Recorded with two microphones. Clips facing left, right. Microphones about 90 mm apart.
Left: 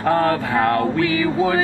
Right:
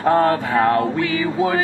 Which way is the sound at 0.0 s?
20° right (ahead or behind).